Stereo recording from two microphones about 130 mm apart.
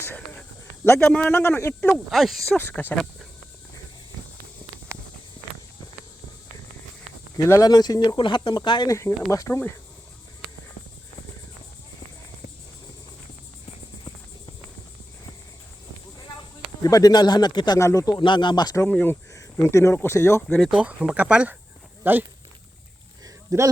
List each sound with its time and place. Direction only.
0.0 s a sound: 15° left (ahead or behind)
0.9 s speech: 15° left (ahead or behind)
1.9 s speech: centre (ahead or behind)
2.6 s speech: 15° left (ahead or behind)
7.3 s speech: 25° left (ahead or behind)
8.9 s speech: 25° left (ahead or behind)
16.8 s speech: 30° left (ahead or behind)
17.7 s speech: 25° left (ahead or behind)
18.9 s speech: 10° left (ahead or behind)
19.3 s speech: 25° left (ahead or behind)
20.5 s speech: 5° left (ahead or behind)
20.7 s speech: 10° right (ahead or behind)
23.2 s a sound: 25° right (ahead or behind)